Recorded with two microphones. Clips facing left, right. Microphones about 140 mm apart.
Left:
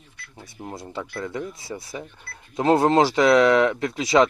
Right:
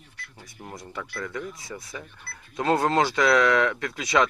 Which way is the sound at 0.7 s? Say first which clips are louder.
Left 4 dB; 30° left (ahead or behind).